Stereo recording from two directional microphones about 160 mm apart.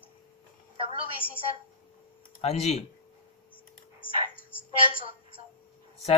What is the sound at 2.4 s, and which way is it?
Speech, 40° left (ahead or behind).